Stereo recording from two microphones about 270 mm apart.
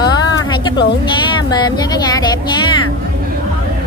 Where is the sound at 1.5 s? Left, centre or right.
Centre.